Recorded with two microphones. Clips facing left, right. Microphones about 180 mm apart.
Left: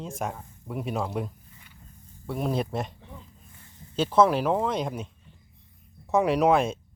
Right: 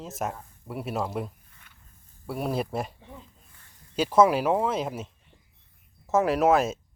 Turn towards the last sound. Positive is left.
turn(degrees=-5)  # may be behind; listen again after turning